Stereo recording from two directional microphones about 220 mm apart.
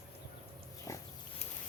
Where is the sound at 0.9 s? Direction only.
15° left (ahead or behind).